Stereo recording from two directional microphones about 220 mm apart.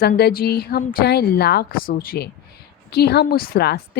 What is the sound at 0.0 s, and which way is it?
Speech, 45° left (ahead or behind).